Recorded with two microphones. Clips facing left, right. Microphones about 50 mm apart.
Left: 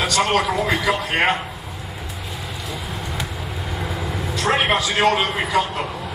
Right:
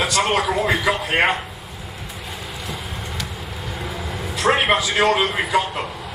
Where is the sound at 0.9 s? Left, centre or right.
Centre.